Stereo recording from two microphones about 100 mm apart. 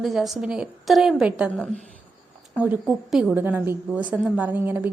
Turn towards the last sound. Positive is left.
turn(degrees=-20)  # may be behind; listen again after turning